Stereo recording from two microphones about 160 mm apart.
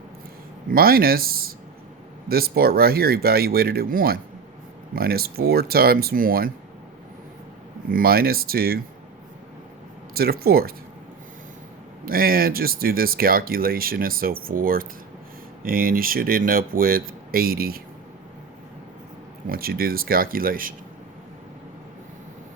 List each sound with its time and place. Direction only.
0.7 s speech: 70° right (ahead or behind)
7.9 s speech: 65° right (ahead or behind)
10.2 s speech: 75° right (ahead or behind)
12.0 s speech: 65° right (ahead or behind)
19.5 s speech: 70° right (ahead or behind)